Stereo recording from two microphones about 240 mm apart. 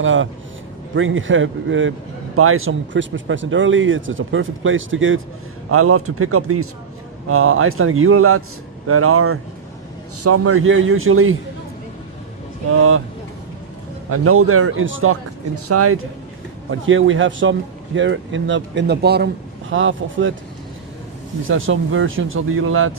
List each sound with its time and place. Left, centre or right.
0.0 s speech: right
10.2 s speech: right
12.7 s speech: right
14.1 s speech: right
16.8 s speech: right
19.7 s speech: right
21.4 s speech: right